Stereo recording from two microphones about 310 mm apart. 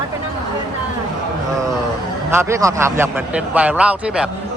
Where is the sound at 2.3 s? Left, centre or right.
Centre.